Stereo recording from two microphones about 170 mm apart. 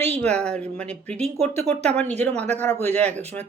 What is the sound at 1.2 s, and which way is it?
Speech, 40° right (ahead or behind).